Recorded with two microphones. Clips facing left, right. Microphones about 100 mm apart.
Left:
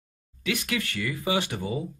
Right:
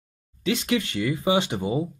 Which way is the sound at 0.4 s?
25° right (ahead or behind).